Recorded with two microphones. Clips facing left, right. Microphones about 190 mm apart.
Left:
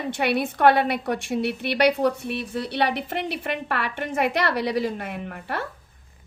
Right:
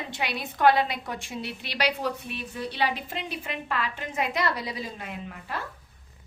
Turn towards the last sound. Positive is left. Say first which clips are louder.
# left 5 dB
turn(degrees=65)  # may be behind; listen again after turning